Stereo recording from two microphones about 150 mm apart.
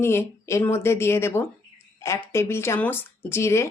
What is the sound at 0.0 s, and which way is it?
Speech, 15° left (ahead or behind).